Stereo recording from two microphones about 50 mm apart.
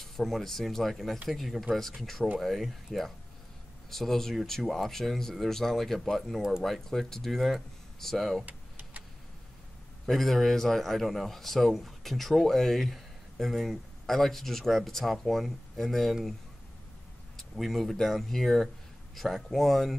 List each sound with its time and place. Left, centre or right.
0.0 s speech: centre
8.5 s a sound: right
10.0 s speech: centre
17.4 s speech: centre